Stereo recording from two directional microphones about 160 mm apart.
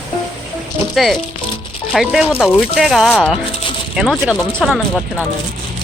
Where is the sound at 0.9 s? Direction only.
Centre (ahead or behind).